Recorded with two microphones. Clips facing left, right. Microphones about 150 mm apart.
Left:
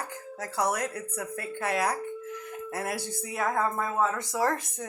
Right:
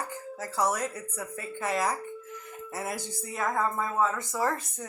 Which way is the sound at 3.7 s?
55° left (ahead or behind).